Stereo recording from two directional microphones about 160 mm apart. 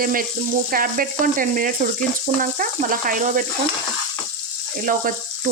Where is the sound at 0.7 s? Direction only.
60° right (ahead or behind).